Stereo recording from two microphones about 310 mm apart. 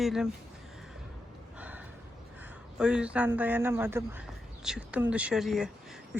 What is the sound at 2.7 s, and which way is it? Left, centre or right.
Speech, centre.